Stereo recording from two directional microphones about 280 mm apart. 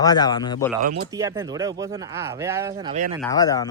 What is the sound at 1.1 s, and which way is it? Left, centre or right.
Speech, centre.